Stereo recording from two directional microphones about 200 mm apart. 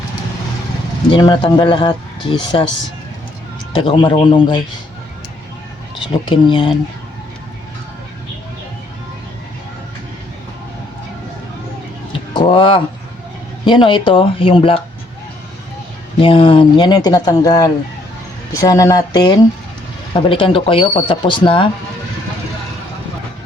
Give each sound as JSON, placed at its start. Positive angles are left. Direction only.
{"t": 1.1, "sound": "speech", "side_deg": 20}
{"t": 3.8, "sound": "speech", "side_deg": 25}
{"t": 6.1, "sound": "speech", "side_deg": 25}
{"t": 12.3, "sound": "speech", "side_deg": 25}
{"t": 16.2, "sound": "speech", "side_deg": 25}